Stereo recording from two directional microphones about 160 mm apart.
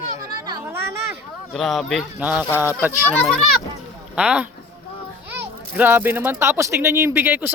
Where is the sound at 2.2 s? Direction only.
10° right (ahead or behind).